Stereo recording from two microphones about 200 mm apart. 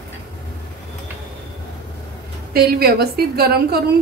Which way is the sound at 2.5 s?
50° right (ahead or behind).